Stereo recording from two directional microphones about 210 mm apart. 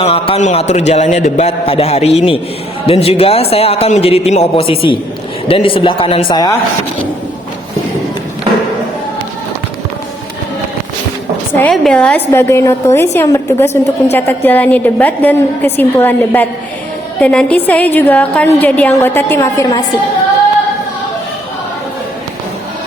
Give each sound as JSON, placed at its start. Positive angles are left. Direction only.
{"t": 0.0, "sound": "a man's voice", "side_deg": 25}
{"t": 11.5, "sound": "a woman's voice", "side_deg": 5}